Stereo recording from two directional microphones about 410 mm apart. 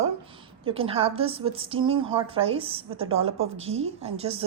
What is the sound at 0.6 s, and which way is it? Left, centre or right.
A woman's voice, centre.